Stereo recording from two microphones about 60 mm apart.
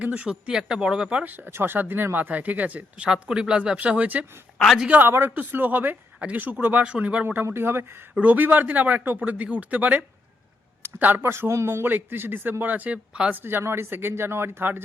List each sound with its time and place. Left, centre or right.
0.0 s speech: right
0.3 s speech: centre
1.2 s speech: right
3.0 s speech: centre
4.5 s a man's voice: centre
5.0 s speech: right
5.3 s speech: right
7.4 s speech: right
8.1 s speech: right
10.8 s a sound: right
11.2 s speech: right